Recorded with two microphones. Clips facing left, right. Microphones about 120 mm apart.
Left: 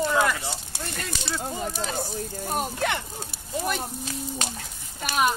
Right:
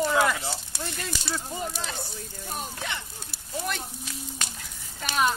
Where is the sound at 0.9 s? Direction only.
55° left (ahead or behind).